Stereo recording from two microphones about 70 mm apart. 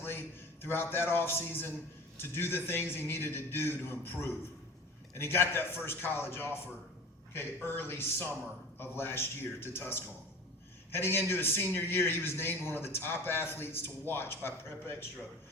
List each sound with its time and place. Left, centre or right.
0.0 s a man's voice: left